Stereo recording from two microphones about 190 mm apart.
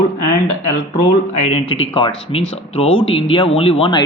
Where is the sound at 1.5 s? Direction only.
30° left (ahead or behind).